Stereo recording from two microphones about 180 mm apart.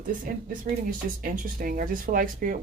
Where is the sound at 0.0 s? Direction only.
50° right (ahead or behind).